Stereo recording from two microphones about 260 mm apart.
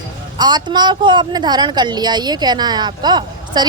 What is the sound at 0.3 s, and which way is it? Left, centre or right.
A woman's voice, centre.